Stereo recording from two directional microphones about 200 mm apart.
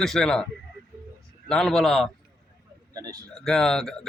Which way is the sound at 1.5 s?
5° left (ahead or behind).